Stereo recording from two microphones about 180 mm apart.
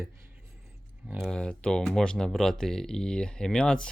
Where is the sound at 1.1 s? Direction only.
10° right (ahead or behind).